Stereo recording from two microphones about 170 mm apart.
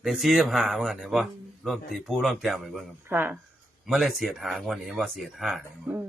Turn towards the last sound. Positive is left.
turn(degrees=-5)  # may be behind; listen again after turning